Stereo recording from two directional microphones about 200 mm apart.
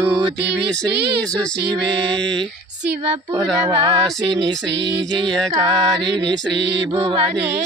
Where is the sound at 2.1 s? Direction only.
5° left (ahead or behind).